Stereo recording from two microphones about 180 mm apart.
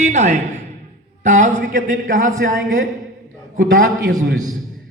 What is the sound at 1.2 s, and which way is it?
A man's voice, 45° right (ahead or behind).